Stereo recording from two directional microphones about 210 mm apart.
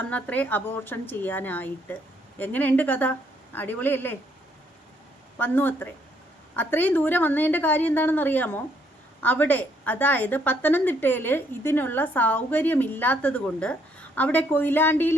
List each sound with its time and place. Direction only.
0.0 s a woman's voice: 5° left (ahead or behind)
5.4 s a woman's voice: 10° left (ahead or behind)